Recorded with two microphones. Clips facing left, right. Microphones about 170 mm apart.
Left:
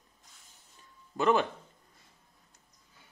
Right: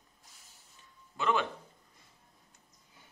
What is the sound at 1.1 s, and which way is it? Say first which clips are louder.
Speech: left 5 dB; 40° left (ahead or behind).